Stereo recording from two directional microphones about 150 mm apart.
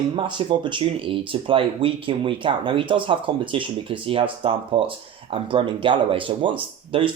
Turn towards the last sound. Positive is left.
turn(degrees=-35)  # may be behind; listen again after turning